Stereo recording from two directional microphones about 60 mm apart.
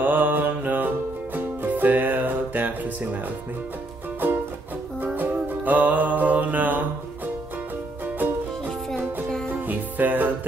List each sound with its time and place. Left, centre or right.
0.0 s music: right
5.0 s music: right
9.7 s music: right